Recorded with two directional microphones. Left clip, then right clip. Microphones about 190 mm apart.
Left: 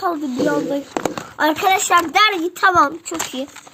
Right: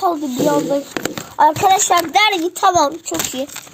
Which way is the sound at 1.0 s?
40° right (ahead or behind).